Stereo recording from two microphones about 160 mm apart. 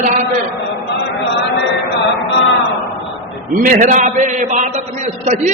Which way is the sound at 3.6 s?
50° right (ahead or behind).